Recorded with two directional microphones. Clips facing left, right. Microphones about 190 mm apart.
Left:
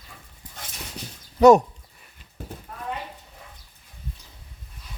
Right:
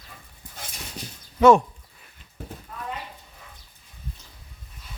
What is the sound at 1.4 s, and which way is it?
Speech, 40° left (ahead or behind).